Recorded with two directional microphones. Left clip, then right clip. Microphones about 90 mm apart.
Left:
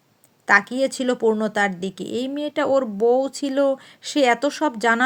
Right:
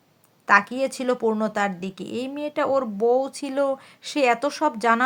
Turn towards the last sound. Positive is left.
turn(degrees=25)  # may be behind; listen again after turning